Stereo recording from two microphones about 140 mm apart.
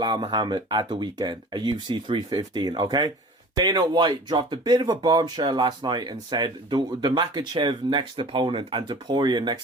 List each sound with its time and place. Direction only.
0.0 s speech: 35° right (ahead or behind)